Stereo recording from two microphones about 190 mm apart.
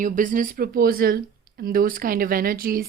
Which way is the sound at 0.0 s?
45° right (ahead or behind).